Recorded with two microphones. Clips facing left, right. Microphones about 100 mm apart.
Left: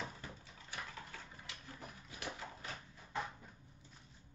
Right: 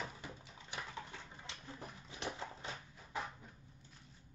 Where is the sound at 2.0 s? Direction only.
25° right (ahead or behind).